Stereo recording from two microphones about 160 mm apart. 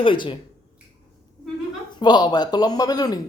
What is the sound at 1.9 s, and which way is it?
Speech, 25° left (ahead or behind).